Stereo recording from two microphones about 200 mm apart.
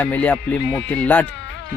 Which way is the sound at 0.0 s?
5° left (ahead or behind).